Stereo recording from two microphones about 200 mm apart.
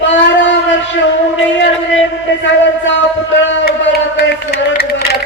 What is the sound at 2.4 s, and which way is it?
Music, 65° left (ahead or behind).